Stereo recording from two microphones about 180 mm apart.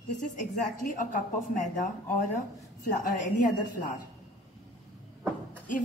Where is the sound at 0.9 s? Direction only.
45° left (ahead or behind).